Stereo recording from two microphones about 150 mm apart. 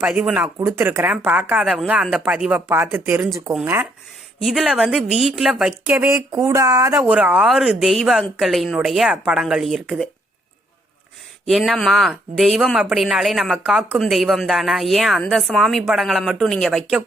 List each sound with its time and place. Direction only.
0.0 s speech: 10° right (ahead or behind)
4.4 s a woman's voice: centre (ahead or behind)
5.8 s speech: 15° right (ahead or behind)
7.0 s a woman's voice: 10° right (ahead or behind)
11.4 s a woman's voice: centre (ahead or behind)